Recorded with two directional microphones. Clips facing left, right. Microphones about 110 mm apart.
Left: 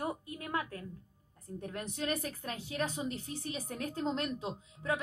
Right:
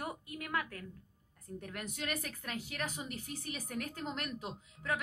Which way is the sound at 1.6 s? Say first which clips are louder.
Left 5 dB; 30° left (ahead or behind).